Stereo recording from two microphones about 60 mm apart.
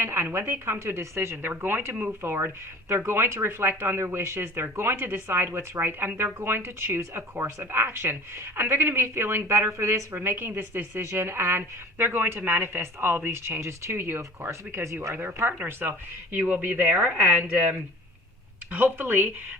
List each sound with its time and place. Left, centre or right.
0.0 s speech: right
1.5 s speech: right